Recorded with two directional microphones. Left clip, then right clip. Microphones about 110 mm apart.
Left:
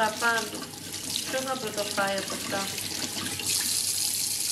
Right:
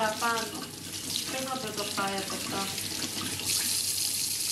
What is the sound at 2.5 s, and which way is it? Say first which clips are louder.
Water tap: left 4 dB; 20° left (ahead or behind).